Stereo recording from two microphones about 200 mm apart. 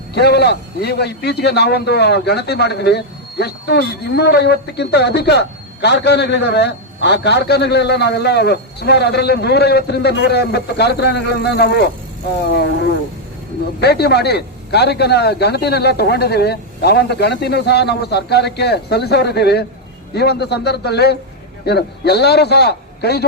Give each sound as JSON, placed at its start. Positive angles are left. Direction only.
{"t": 0.1, "sound": "a man's voice", "side_deg": 55}
{"t": 13.8, "sound": "a man's voice", "side_deg": 55}